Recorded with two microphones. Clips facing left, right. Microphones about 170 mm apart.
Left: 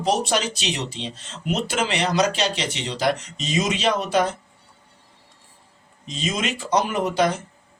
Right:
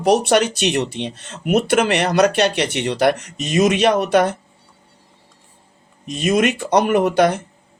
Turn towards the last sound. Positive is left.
turn(degrees=-65)  # may be behind; listen again after turning